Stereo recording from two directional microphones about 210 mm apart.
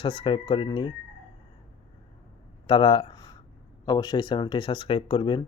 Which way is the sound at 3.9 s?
20° left (ahead or behind).